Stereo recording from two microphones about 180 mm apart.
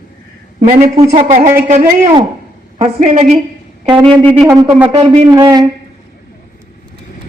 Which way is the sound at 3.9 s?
25° right (ahead or behind).